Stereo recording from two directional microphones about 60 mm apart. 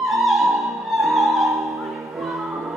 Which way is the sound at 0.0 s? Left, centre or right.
Centre.